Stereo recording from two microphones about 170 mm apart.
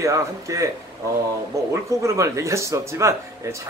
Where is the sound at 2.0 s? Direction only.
15° right (ahead or behind).